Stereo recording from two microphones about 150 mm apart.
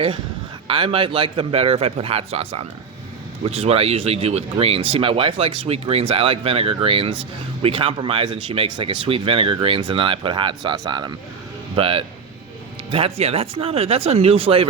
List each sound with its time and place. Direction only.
0.7 s speech: 35° right (ahead or behind)